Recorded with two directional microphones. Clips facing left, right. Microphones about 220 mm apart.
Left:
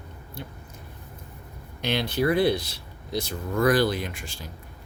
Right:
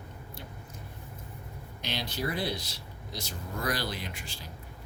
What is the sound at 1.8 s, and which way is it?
Speech, 60° left (ahead or behind).